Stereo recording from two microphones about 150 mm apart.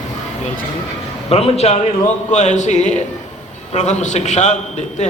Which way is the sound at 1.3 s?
45° left (ahead or behind).